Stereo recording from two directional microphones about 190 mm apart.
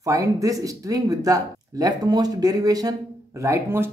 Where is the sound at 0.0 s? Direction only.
15° right (ahead or behind).